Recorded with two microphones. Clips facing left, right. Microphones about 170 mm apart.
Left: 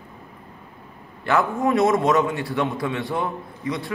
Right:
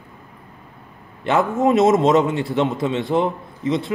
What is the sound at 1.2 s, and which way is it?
A man's voice, 20° right (ahead or behind).